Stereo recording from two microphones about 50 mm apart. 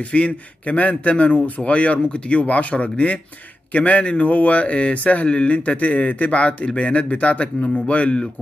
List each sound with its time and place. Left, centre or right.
0.0 s speech: left